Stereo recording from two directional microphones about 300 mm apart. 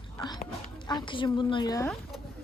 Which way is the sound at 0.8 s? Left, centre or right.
Centre.